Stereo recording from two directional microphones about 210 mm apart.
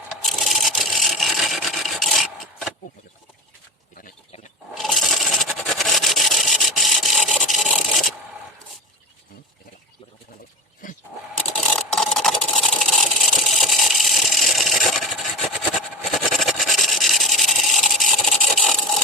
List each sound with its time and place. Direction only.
0.3 s filing: centre (ahead or behind)
3.9 s a sound: 40° left (ahead or behind)
4.7 s rub: centre (ahead or behind)
10.8 s roaring cats: 40° left (ahead or behind)
11.5 s engine: 5° left (ahead or behind)
16.4 s a sound: centre (ahead or behind)